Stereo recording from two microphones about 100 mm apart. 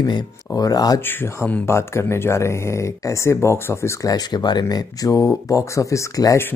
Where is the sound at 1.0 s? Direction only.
20° left (ahead or behind).